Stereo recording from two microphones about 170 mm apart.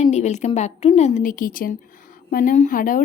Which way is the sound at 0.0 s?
40° left (ahead or behind).